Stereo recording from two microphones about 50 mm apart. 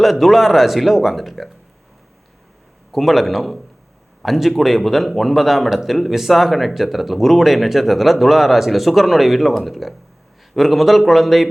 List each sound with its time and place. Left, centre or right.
0.0 s speech: centre
2.9 s speech: centre